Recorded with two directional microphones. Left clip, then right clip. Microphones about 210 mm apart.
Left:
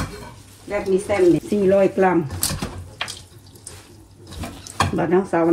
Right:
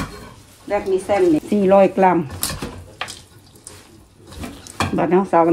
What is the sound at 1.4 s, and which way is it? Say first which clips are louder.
Speech: right 3 dB; 40° right (ahead or behind).